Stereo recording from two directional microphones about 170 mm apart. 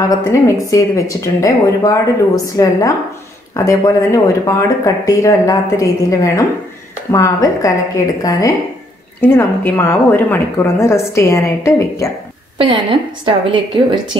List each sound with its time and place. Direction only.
0.3 s a woman's voice: 20° left (ahead or behind)
12.5 s a woman's voice: 30° right (ahead or behind)